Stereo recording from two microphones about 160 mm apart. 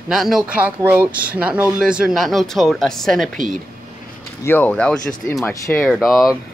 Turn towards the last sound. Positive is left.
turn(degrees=0)  # may be behind; listen again after turning